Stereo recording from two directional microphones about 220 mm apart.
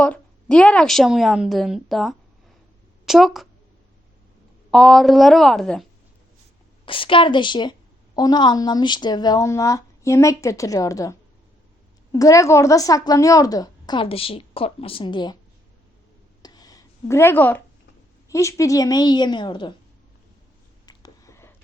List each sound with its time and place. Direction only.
0.0 s a woman's voice: 5° left (ahead or behind)
4.7 s a woman's voice: centre (ahead or behind)
6.8 s a woman's voice: 25° left (ahead or behind)
16.4 s a sound: 20° left (ahead or behind)
18.3 s a woman's voice: 15° left (ahead or behind)
20.8 s a sound: 15° left (ahead or behind)